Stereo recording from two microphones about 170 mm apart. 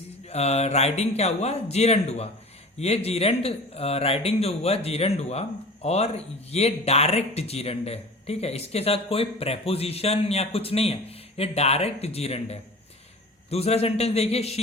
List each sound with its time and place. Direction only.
0.3 s speech: 40° left (ahead or behind)